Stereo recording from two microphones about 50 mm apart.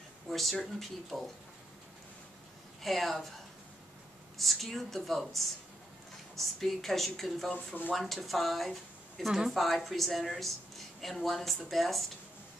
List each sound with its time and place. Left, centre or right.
0.3 s a woman's voice: centre
2.8 s a woman's voice: centre
4.4 s a woman's voice: centre
7.5 s speech: left
7.9 s a woman's voice: centre